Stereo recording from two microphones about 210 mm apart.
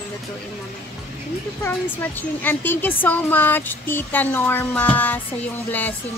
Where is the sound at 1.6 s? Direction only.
10° left (ahead or behind).